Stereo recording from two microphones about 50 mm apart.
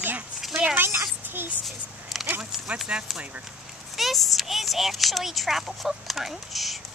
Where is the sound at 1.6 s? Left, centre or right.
Centre.